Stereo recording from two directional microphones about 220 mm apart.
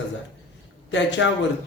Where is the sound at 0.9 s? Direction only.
55° left (ahead or behind).